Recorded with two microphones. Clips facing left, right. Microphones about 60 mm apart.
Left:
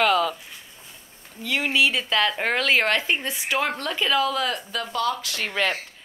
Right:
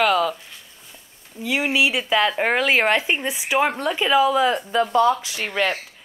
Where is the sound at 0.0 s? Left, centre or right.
Centre.